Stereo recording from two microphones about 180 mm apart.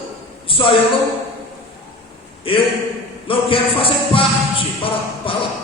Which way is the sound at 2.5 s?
30° left (ahead or behind).